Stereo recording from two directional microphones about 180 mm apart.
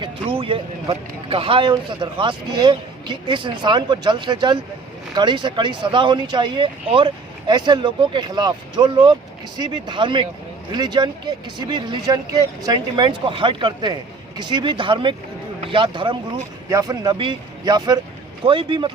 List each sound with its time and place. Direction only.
0.0 s speech: 30° right (ahead or behind)